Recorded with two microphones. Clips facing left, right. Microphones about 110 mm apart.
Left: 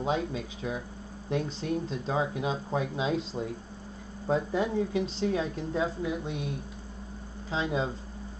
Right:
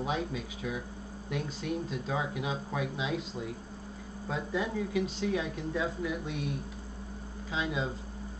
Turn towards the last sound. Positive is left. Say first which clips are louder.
# left 3 dB
turn(degrees=30)  # may be behind; listen again after turning